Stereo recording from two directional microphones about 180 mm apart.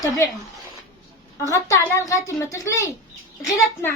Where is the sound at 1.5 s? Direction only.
15° left (ahead or behind).